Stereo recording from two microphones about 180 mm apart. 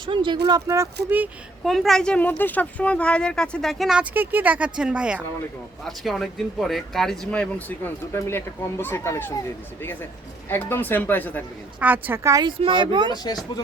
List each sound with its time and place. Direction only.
0.0 s speech: 25° right (ahead or behind)
1.1 s speech: 5° right (ahead or behind)
11.8 s speech: 10° right (ahead or behind); by 13.1 s 25° right (ahead or behind)
13.1 s speech: 20° left (ahead or behind)